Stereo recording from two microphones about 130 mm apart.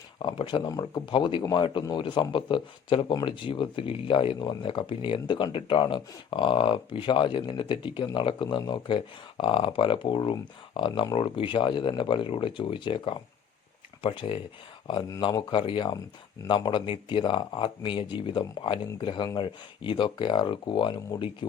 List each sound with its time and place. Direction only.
0.2 s speech: 40° left (ahead or behind)